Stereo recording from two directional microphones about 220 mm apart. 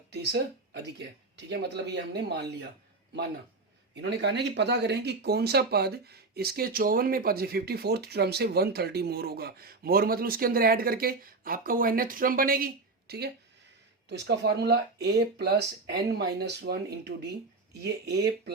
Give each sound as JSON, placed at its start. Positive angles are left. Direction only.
{"t": 0.1, "sound": "speech", "side_deg": -50}
{"t": 4.0, "sound": "speech", "side_deg": -50}